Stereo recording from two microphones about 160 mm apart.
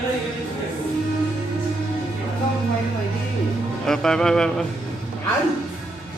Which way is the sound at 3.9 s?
5° left (ahead or behind).